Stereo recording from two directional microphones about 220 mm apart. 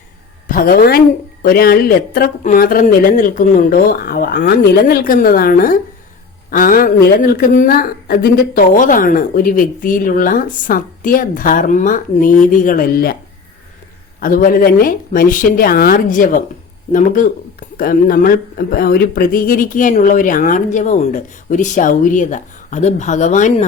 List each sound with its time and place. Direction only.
0.4 s speech: 40° left (ahead or behind)
14.2 s speech: 40° left (ahead or behind)